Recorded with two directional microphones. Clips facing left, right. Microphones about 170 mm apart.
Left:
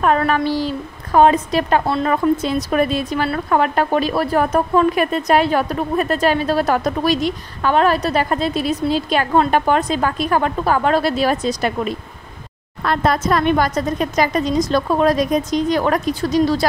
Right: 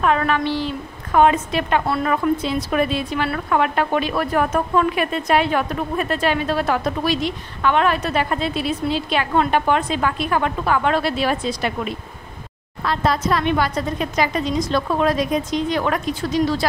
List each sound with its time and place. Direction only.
0.0 s speech: 40° left (ahead or behind)
1.9 s speech: 25° left (ahead or behind)
2.3 s speech: 45° left (ahead or behind)
12.8 s speech: 55° left (ahead or behind); by 16.6 s 40° left (ahead or behind)